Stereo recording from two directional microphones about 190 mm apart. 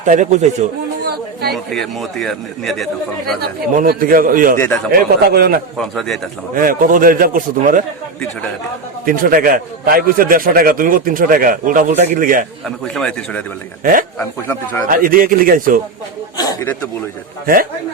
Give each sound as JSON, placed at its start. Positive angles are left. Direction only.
{"t": 0.0, "sound": "a man's voice", "side_deg": -40}
{"t": 1.0, "sound": "chatter", "side_deg": -55}
{"t": 1.5, "sound": "a man's voice", "side_deg": 0}
{"t": 3.4, "sound": "a man's voice", "side_deg": -50}
{"t": 5.7, "sound": "a man's voice", "side_deg": 0}
{"t": 6.5, "sound": "a man's voice", "side_deg": -45}
{"t": 9.0, "sound": "a man's voice", "side_deg": -45}
{"t": 12.6, "sound": "a man's voice", "side_deg": 0}
{"t": 14.8, "sound": "a man's voice", "side_deg": -50}
{"t": 16.4, "sound": "a sound", "side_deg": 15}
{"t": 17.4, "sound": "a man's voice", "side_deg": -50}